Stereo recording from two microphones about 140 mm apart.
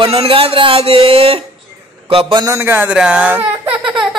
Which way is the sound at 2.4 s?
20° right (ahead or behind).